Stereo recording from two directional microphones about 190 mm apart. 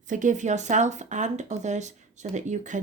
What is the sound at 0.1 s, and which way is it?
Speech, 40° right (ahead or behind).